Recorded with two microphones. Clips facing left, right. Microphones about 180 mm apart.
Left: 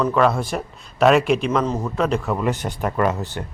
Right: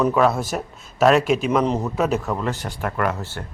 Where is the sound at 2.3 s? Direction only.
15° left (ahead or behind).